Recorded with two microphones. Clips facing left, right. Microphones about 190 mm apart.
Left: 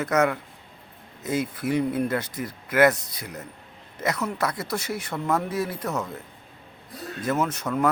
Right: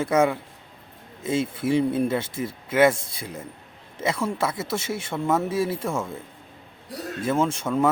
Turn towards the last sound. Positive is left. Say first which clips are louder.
# right 2 dB
turn(degrees=-25)  # may be behind; listen again after turning